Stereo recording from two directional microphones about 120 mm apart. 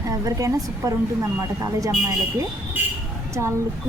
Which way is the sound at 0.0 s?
30° right (ahead or behind).